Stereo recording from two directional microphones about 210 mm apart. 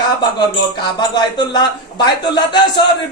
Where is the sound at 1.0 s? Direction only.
20° left (ahead or behind).